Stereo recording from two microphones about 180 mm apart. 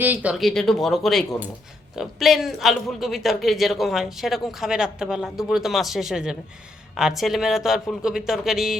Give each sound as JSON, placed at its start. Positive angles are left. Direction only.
{"t": 0.0, "sound": "a man's voice", "side_deg": -10}